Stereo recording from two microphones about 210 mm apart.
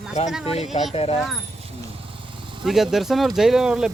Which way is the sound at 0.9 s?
30° left (ahead or behind).